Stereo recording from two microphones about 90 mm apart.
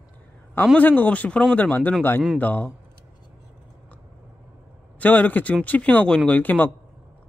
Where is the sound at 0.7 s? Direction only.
20° left (ahead or behind).